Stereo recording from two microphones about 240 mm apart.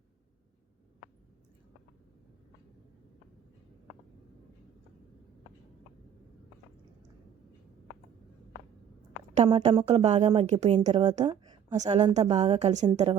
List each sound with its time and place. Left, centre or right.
9.3 s a woman's voice: right